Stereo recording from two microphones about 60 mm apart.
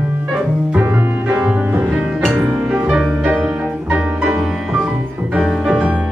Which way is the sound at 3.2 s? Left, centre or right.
Right.